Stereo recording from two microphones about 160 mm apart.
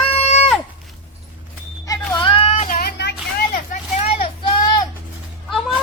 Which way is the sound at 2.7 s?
70° left (ahead or behind).